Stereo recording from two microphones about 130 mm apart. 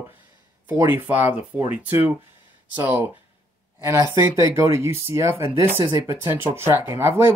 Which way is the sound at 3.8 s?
20° right (ahead or behind).